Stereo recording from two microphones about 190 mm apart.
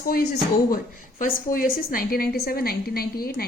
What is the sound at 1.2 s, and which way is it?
A woman's voice, 45° left (ahead or behind).